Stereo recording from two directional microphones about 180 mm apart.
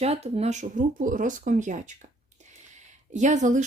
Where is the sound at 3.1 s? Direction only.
40° right (ahead or behind).